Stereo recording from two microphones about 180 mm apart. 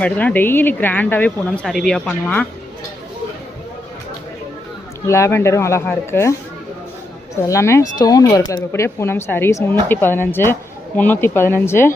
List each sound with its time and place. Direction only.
0.0 s speech: 10° left (ahead or behind)
5.0 s speech: 15° left (ahead or behind)
7.4 s speech: 15° left (ahead or behind)